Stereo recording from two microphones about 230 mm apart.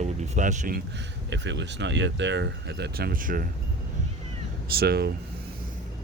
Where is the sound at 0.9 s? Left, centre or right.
Right.